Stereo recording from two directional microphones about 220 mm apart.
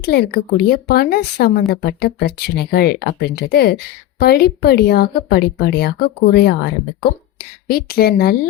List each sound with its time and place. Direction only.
0.0 s a woman's voice: 45° left (ahead or behind)